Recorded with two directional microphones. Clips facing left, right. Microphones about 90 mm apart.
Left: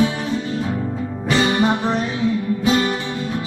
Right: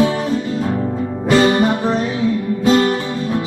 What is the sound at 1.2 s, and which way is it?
Music, 55° right (ahead or behind).